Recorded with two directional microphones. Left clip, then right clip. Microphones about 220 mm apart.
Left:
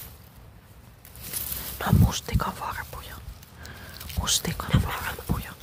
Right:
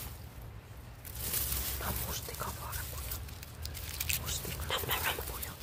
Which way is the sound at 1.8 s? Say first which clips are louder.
Left 12 dB; 30° left (ahead or behind).